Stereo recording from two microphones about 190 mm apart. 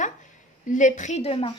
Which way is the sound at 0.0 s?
40° left (ahead or behind).